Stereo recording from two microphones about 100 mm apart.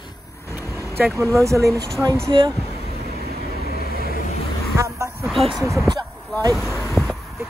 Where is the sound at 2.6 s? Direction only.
90° left.